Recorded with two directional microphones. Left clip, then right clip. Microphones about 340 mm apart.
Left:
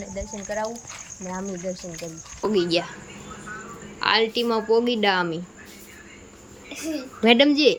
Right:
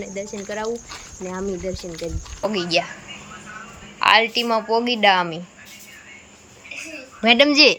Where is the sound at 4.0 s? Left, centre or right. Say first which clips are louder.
Right 5 dB; centre.